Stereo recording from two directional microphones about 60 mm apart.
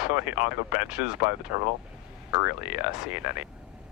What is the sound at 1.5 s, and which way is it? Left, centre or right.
Speech, right.